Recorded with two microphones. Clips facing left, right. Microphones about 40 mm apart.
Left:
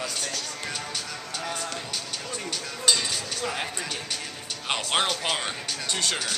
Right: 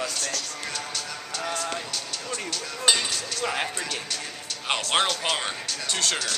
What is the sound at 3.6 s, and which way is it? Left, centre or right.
Music, centre.